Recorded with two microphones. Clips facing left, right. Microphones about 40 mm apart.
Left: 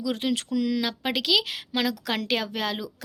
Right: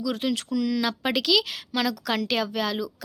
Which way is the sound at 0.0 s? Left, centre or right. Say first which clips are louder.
Even; left.